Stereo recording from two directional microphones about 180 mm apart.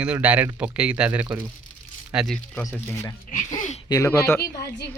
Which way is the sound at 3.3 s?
45° left (ahead or behind).